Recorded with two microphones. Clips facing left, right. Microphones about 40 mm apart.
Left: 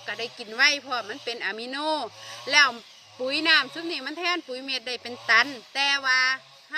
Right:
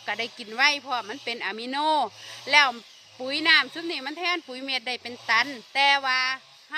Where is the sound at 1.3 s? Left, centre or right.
Right.